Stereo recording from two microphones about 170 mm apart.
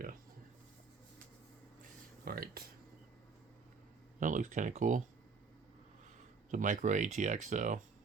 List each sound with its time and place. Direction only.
2.2 s speech: 60° right (ahead or behind)
4.2 s speech: 50° right (ahead or behind)
6.5 s speech: 50° right (ahead or behind)